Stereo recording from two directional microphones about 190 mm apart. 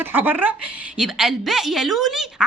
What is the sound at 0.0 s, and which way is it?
A woman's voice, 10° right (ahead or behind).